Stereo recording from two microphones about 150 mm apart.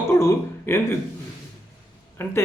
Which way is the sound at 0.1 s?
15° left (ahead or behind).